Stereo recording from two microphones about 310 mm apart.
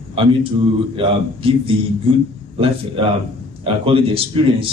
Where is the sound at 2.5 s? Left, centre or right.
Centre.